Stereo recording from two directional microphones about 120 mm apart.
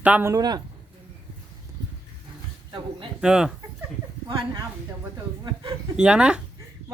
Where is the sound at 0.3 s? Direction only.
30° right (ahead or behind).